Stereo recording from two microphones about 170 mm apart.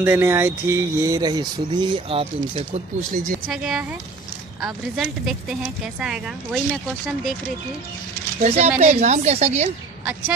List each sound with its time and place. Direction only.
0.0 s speech: 15° right (ahead or behind); by 3.3 s 45° right (ahead or behind)
3.4 s a woman's voice: 5° right (ahead or behind)
8.4 s a woman's voice: 40° right (ahead or behind)